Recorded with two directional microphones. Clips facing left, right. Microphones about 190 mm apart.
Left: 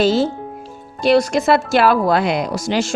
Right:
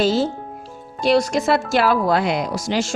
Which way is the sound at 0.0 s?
65° left (ahead or behind).